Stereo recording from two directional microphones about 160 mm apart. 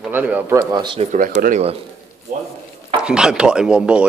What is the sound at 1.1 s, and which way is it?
Speech, 60° right (ahead or behind).